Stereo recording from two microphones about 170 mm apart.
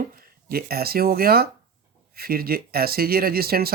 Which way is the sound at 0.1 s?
60° right (ahead or behind).